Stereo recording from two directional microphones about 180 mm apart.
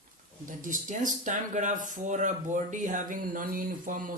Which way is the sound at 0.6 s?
45° right (ahead or behind).